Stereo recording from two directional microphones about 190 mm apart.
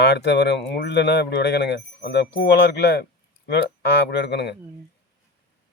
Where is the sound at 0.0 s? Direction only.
65° left (ahead or behind).